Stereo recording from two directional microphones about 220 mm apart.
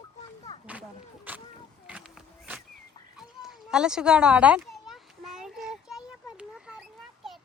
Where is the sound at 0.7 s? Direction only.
5° right (ahead or behind).